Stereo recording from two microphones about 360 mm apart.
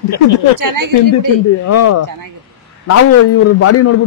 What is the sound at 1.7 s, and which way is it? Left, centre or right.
Speech, left.